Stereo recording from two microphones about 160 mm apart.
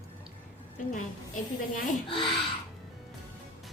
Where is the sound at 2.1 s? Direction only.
35° left (ahead or behind).